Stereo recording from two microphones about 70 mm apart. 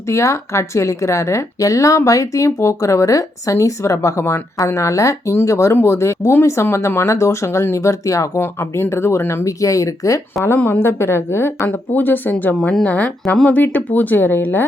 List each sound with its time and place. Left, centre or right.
0.1 s a woman's voice: left
8.4 s a woman's voice: left
10.7 s speech: left